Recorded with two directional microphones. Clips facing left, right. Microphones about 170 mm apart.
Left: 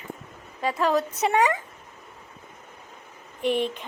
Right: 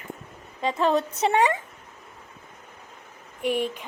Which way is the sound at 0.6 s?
25° right (ahead or behind).